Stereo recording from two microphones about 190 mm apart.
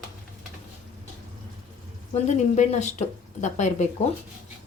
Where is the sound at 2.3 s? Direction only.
35° left (ahead or behind).